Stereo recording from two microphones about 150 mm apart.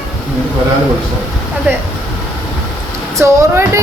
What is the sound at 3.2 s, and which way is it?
Speech, 15° right (ahead or behind).